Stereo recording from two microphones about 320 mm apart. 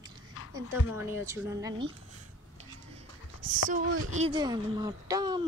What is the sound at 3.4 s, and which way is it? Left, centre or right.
Speech, right.